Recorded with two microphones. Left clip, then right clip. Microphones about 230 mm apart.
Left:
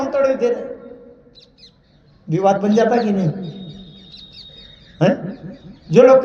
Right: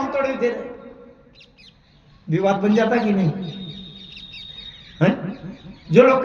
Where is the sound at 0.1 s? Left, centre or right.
Right.